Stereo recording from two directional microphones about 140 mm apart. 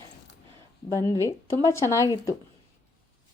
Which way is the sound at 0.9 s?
25° left (ahead or behind).